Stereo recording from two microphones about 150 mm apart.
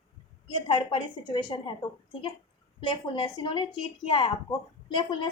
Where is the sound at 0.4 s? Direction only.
35° left (ahead or behind).